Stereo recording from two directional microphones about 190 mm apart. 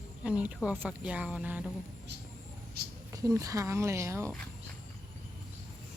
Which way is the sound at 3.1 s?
15° right (ahead or behind).